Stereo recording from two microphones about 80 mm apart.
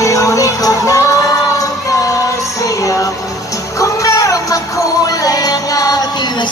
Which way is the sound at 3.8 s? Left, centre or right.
Left.